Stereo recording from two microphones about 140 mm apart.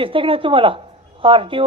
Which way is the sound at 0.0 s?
40° right (ahead or behind).